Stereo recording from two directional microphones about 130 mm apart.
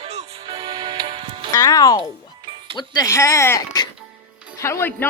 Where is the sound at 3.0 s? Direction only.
20° left (ahead or behind).